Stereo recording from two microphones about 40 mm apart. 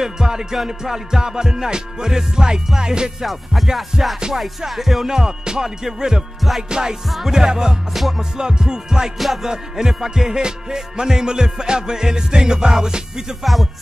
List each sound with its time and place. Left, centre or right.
0.0 s music: centre
3.2 s music: centre
5.0 s music: centre
7.1 s music: centre
7.3 s music: centre
7.9 s music: centre
8.2 s music: centre
13.4 s music: centre